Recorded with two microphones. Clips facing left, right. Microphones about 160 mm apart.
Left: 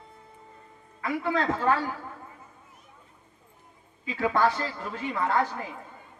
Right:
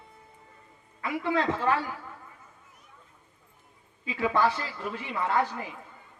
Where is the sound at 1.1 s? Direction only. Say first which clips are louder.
Left 1 dB; 15° right (ahead or behind).